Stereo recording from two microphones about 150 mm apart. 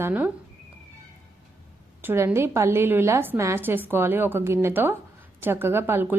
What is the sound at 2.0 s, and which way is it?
A woman's voice, 15° right (ahead or behind).